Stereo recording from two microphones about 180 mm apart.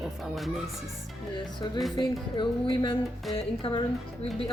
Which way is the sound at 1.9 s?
25° left (ahead or behind).